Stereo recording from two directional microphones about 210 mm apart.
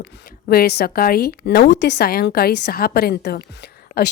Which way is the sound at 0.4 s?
45° left (ahead or behind).